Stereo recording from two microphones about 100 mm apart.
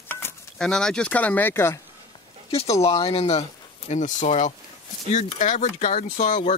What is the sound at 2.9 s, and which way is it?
Speech, 80° left.